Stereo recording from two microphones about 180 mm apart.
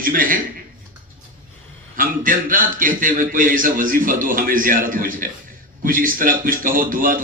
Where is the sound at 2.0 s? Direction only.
50° right (ahead or behind).